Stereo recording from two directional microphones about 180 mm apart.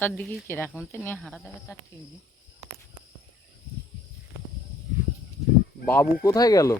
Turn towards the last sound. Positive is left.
turn(degrees=20)  # may be behind; listen again after turning